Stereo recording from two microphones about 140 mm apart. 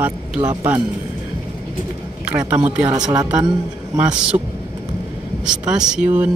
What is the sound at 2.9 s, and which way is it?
Speech, 30° right (ahead or behind).